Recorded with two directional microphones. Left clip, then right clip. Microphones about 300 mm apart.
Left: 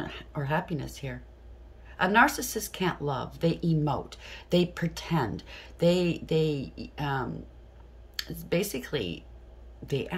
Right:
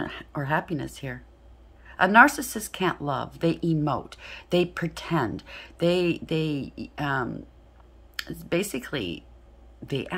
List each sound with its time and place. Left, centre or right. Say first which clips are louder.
0.0 s a woman's voice: right 4 dB; centre